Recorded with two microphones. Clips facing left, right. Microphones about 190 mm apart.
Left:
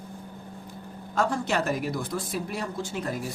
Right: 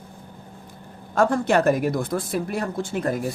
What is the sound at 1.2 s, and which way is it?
Speech, 55° right (ahead or behind).